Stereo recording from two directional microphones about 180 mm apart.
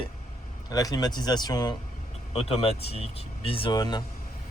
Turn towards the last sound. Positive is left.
turn(degrees=25)  # may be behind; listen again after turning